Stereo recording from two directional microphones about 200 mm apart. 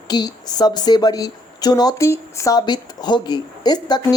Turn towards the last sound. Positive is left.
turn(degrees=20)  # may be behind; listen again after turning